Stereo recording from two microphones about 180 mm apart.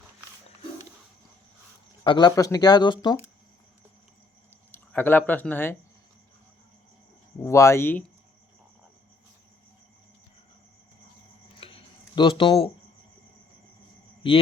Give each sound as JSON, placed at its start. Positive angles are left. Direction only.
{"t": 2.0, "sound": "speech", "side_deg": 25}
{"t": 4.7, "sound": "speech", "side_deg": 10}
{"t": 7.4, "sound": "speech", "side_deg": 15}
{"t": 11.6, "sound": "a sound", "side_deg": 30}